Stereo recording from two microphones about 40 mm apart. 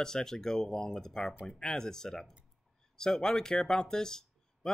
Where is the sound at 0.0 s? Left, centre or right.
Centre.